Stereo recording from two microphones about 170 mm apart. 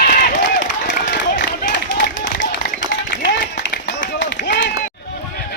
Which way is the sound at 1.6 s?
90° left.